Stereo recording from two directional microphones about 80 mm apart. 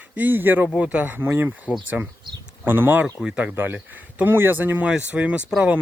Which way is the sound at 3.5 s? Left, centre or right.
Right.